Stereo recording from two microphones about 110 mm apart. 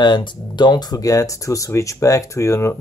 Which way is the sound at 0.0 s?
45° left (ahead or behind).